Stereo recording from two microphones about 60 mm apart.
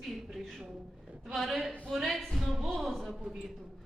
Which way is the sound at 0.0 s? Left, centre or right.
Centre.